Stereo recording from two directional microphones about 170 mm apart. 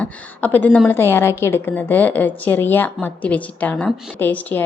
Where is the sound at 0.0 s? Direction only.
10° left (ahead or behind).